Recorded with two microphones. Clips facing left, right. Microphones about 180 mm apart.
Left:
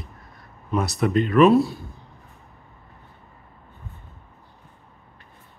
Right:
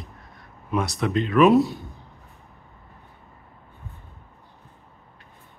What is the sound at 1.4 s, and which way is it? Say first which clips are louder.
Speech: right 1 dB; 20° right (ahead or behind).